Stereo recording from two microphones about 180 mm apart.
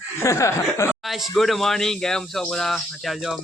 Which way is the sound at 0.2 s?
15° left (ahead or behind).